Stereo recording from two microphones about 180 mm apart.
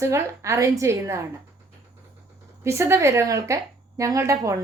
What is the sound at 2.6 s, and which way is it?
A woman's voice, 15° right (ahead or behind).